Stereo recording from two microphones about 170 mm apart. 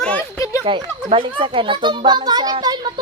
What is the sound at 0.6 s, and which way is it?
A child's voice, 25° right (ahead or behind).